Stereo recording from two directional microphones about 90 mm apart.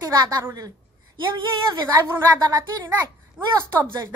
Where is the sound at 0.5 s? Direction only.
40° right (ahead or behind).